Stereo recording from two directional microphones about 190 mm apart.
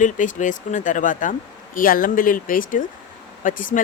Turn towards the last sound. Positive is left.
turn(degrees=45)  # may be behind; listen again after turning